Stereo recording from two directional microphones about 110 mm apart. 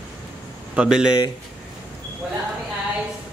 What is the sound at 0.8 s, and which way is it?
Speech, 10° right (ahead or behind).